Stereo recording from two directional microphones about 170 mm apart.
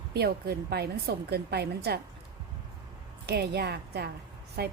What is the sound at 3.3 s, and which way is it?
A woman's voice, 70° right (ahead or behind).